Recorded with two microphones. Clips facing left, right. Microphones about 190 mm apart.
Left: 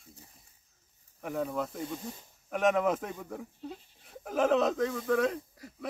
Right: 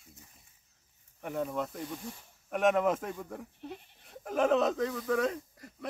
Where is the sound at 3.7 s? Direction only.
65° right (ahead or behind).